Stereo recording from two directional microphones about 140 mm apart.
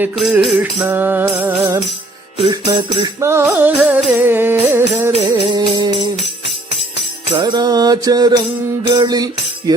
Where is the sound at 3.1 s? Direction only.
20° right (ahead or behind).